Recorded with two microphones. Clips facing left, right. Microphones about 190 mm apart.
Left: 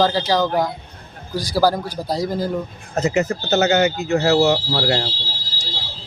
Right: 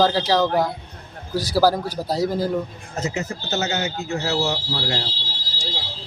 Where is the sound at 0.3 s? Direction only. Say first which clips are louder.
Even; 5° right (ahead or behind).